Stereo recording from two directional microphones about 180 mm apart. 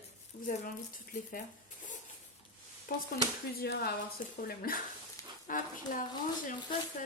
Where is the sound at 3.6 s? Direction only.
65° left (ahead or behind).